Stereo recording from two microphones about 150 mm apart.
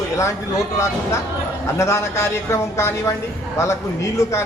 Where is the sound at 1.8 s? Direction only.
20° left (ahead or behind).